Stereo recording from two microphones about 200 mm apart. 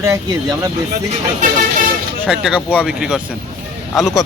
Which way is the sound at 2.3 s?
5° right (ahead or behind).